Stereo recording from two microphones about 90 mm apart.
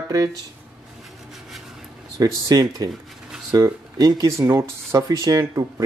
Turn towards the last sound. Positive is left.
turn(degrees=-40)  # may be behind; listen again after turning